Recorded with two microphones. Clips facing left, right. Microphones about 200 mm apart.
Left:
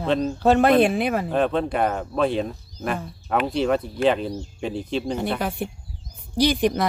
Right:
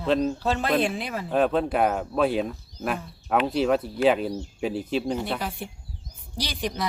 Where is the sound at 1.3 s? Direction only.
5° right (ahead or behind).